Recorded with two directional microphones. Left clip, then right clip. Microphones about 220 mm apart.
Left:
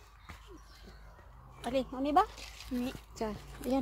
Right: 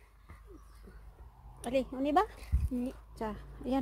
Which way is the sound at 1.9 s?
45° right (ahead or behind).